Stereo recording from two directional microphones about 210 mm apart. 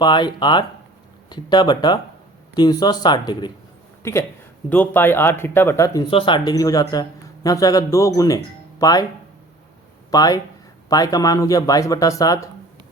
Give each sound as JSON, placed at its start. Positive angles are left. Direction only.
{"t": 0.0, "sound": "speech", "side_deg": 20}
{"t": 10.1, "sound": "speech", "side_deg": 15}